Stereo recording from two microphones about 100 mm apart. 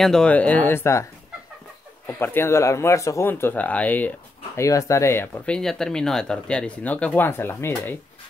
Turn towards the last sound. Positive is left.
turn(degrees=20)  # may be behind; listen again after turning